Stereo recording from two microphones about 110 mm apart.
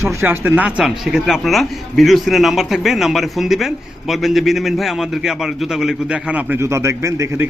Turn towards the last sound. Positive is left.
turn(degrees=-25)  # may be behind; listen again after turning